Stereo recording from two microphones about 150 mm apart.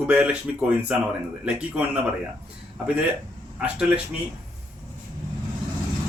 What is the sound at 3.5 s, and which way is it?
Speech, 5° right (ahead or behind).